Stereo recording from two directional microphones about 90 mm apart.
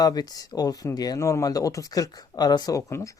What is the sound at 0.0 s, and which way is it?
Speech, 45° left (ahead or behind).